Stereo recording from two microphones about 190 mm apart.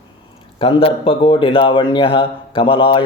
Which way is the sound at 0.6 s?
30° left (ahead or behind).